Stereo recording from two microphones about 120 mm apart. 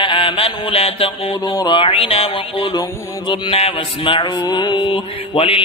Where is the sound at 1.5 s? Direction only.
30° left (ahead or behind).